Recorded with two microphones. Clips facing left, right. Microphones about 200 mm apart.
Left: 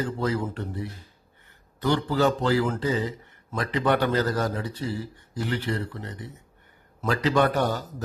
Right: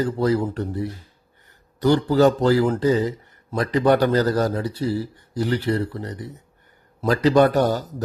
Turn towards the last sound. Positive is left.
turn(degrees=-40)  # may be behind; listen again after turning